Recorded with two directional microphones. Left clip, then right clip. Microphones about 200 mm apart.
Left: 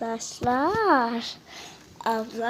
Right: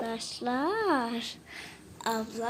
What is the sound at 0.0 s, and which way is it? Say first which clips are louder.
A woman's voice: left 6 dB; 30° left (ahead or behind).